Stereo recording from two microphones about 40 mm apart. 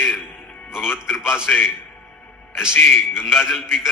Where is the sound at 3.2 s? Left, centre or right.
Centre.